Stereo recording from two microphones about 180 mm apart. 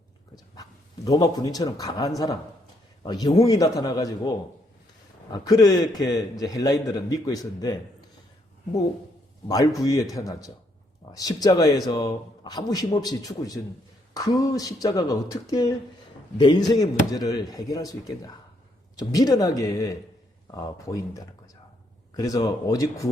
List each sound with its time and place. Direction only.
0.5 s a man's voice: 20° left (ahead or behind)
9.5 s a man's voice: 20° left (ahead or behind)